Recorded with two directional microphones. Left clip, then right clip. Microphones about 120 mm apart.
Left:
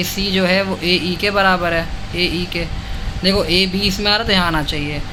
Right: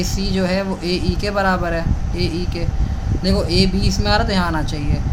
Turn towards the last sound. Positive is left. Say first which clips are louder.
# left 5 dB
turn(degrees=15)  # may be behind; listen again after turning